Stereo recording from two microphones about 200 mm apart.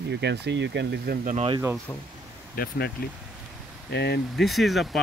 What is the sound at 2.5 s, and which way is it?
Speech, 50° left (ahead or behind).